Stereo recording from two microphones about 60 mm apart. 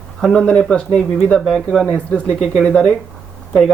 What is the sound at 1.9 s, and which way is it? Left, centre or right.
Speech, left.